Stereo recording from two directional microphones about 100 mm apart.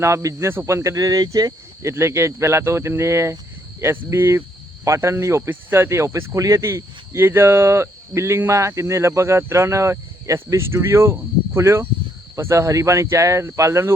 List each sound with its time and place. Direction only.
0.0 s speech: 30° right (ahead or behind)